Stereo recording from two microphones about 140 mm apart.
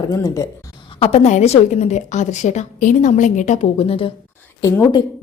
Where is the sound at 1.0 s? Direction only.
45° left (ahead or behind).